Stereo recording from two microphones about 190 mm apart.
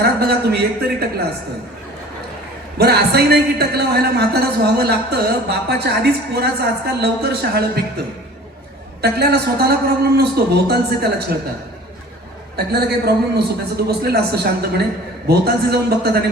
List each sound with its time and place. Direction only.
0.0 s a man's voice: 55° right (ahead or behind)
2.7 s a man's voice: 55° right (ahead or behind)
12.5 s a man's voice: 60° right (ahead or behind)